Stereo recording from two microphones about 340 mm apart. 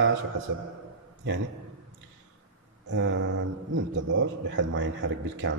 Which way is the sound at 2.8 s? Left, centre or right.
Right.